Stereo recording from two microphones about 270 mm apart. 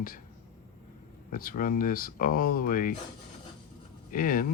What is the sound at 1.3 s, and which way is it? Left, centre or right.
Speech, left.